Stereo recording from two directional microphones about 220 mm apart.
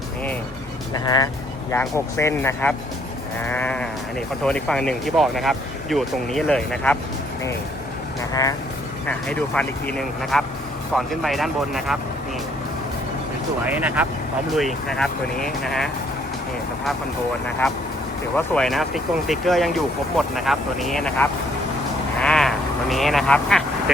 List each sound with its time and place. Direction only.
0.9 s speech: 20° left (ahead or behind)
8.3 s speech: 15° left (ahead or behind)
9.0 s speech: 5° left (ahead or behind)
13.7 s speech: 5° right (ahead or behind)
18.3 s speech: 5° left (ahead or behind)
22.2 s sheep: centre (ahead or behind)